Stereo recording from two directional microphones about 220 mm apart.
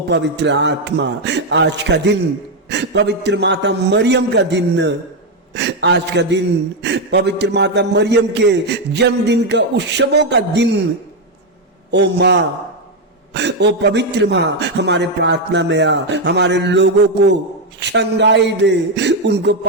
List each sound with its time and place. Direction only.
0.1 s a man's voice: 50° right (ahead or behind)
11.9 s a man's voice: 50° right (ahead or behind)